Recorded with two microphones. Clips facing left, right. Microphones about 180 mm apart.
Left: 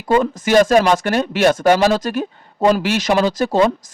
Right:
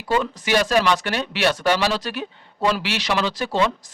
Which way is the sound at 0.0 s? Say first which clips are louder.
Left 6 dB; 45° left (ahead or behind).